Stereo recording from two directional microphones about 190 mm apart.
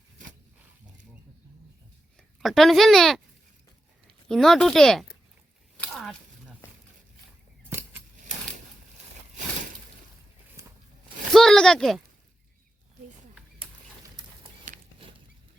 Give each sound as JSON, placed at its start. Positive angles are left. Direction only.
{"t": 2.4, "sound": "speech", "side_deg": 0}
{"t": 4.3, "sound": "speech", "side_deg": 5}
{"t": 5.8, "sound": "a sound", "side_deg": 0}
{"t": 7.7, "sound": "keys jangling", "side_deg": -10}
{"t": 11.3, "sound": "speech", "side_deg": 5}
{"t": 14.7, "sound": "a sound", "side_deg": -40}